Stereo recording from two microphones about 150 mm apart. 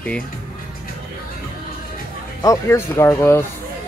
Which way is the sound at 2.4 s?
15° left (ahead or behind).